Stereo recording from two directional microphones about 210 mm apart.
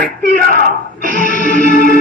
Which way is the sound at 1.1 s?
40° left (ahead or behind).